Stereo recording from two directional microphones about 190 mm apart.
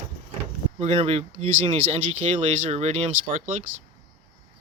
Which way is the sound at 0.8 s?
35° right (ahead or behind).